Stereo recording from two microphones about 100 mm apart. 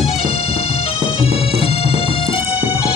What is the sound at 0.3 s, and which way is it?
Music, 80° left.